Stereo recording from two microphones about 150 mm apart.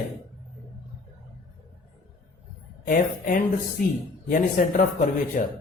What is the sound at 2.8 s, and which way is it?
A man's voice, 65° left (ahead or behind).